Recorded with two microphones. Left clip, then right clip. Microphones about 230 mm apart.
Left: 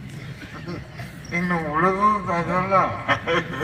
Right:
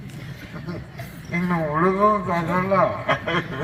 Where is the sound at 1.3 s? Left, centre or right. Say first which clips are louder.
Even; right.